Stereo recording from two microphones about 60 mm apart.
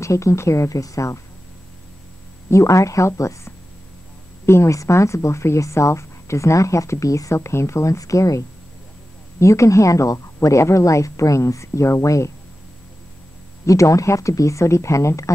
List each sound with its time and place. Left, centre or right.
0.0 s speech: left
2.5 s speech: left
7.3 s speech: left
13.7 s speech: left